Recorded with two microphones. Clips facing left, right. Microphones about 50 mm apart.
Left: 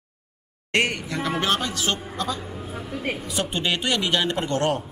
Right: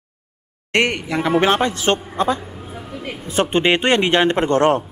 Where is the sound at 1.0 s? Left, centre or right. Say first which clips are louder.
Right 8 dB; right.